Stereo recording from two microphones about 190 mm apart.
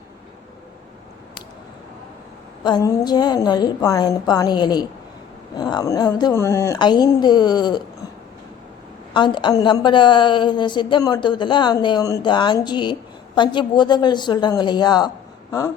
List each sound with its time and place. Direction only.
2.6 s a woman's voice: 20° left (ahead or behind)
9.1 s a woman's voice: 25° left (ahead or behind)